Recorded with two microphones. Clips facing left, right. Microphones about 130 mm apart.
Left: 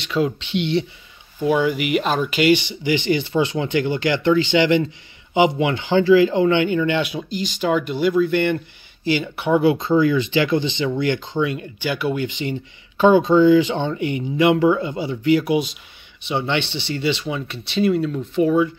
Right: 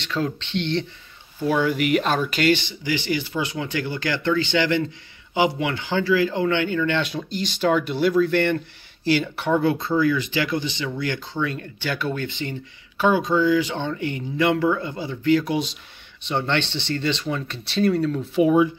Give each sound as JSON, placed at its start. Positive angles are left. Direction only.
{"t": 0.0, "sound": "speech", "side_deg": 10}
{"t": 18.4, "sound": "speech", "side_deg": -10}